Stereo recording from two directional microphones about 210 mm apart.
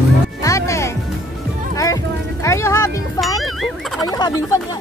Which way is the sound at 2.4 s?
15° left (ahead or behind).